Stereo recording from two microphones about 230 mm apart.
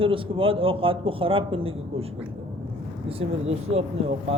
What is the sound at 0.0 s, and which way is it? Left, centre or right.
Speech, right.